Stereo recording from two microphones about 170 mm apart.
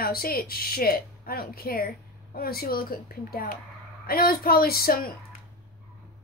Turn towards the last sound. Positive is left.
turn(degrees=60)  # may be behind; listen again after turning